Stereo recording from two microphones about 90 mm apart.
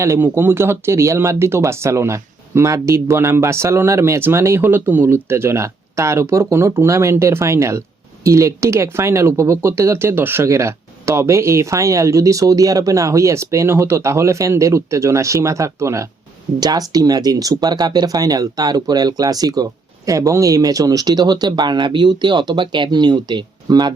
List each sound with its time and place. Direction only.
0.0 s speech: 25° right (ahead or behind)
16.6 s speech: 45° right (ahead or behind)